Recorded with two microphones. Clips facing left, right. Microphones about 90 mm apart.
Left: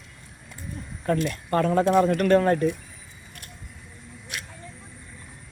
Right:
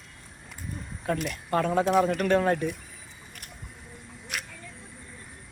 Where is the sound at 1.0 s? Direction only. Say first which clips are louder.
Left 5 dB; 10° right (ahead or behind).